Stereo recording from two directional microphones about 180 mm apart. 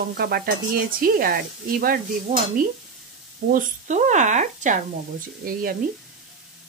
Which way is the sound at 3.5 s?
40° right (ahead or behind).